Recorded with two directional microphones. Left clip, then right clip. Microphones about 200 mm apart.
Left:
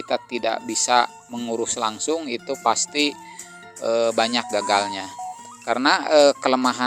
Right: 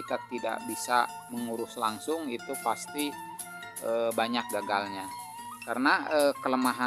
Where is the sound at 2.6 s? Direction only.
30° left (ahead or behind).